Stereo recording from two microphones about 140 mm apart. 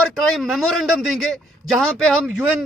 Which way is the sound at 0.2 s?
Centre (ahead or behind).